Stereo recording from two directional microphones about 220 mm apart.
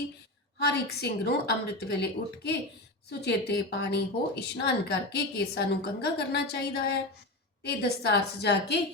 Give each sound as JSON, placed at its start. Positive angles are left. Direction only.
{"t": 0.6, "sound": "speech", "side_deg": 50}